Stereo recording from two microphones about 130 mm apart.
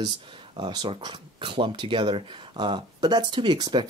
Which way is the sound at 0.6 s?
35° right (ahead or behind).